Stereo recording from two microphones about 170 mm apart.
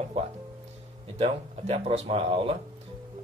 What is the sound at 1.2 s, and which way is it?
Speech, 35° right (ahead or behind).